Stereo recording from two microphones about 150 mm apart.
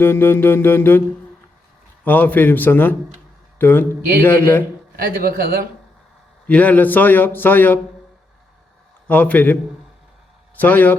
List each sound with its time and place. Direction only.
0.0 s a man's voice: 15° left (ahead or behind)
2.0 s a man's voice: 10° left (ahead or behind)
4.9 s a man's voice: 75° right (ahead or behind)
6.5 s a man's voice: 10° left (ahead or behind)
9.0 s a man's voice: 10° left (ahead or behind)
10.6 s a man's voice: 10° left (ahead or behind)